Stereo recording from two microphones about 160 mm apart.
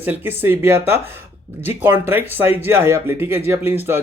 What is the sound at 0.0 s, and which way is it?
Speech, 15° right (ahead or behind).